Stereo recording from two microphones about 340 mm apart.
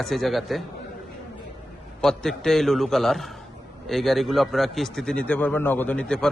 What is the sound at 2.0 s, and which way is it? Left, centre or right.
A man's voice, centre.